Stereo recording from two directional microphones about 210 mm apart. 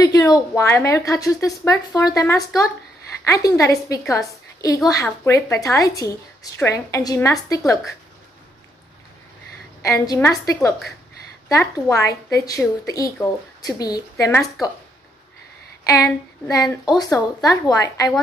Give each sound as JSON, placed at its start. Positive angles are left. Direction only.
{"t": 0.0, "sound": "a woman's voice", "side_deg": 15}
{"t": 9.8, "sound": "a woman's voice", "side_deg": 15}
{"t": 15.8, "sound": "a woman's voice", "side_deg": 15}